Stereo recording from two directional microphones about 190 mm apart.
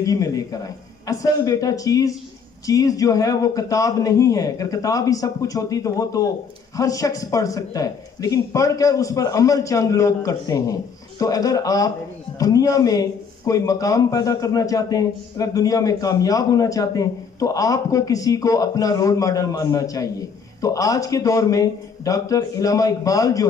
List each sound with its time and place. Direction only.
0.0 s speech: 20° left (ahead or behind)